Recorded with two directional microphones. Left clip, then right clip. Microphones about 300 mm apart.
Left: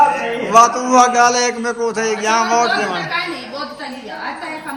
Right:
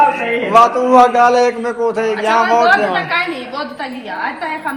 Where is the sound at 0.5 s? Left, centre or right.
Centre.